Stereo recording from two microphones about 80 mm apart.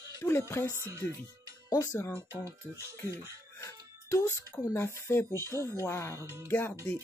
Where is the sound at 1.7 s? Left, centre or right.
Left.